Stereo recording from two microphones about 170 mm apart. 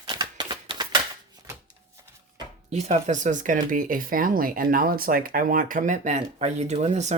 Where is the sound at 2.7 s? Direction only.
40° right (ahead or behind).